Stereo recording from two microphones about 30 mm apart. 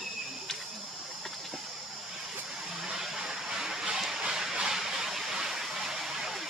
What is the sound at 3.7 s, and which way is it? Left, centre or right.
Stream, right.